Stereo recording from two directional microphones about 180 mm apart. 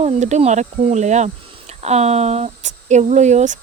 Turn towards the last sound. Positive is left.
turn(degrees=-40)  # may be behind; listen again after turning